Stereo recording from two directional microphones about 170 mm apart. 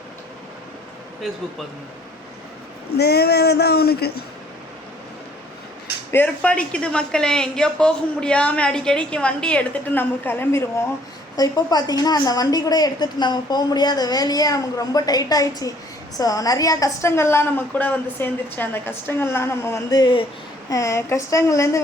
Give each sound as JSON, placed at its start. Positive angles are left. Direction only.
{"t": 2.9, "sound": "speech", "side_deg": 70}
{"t": 6.1, "sound": "a woman's voice", "side_deg": 10}
{"t": 11.3, "sound": "a woman's voice", "side_deg": 20}